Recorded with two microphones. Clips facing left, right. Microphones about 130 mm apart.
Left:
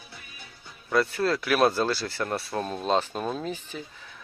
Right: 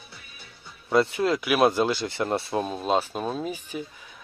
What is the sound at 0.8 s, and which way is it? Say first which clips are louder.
Speech: right 2 dB; 25° right (ahead or behind).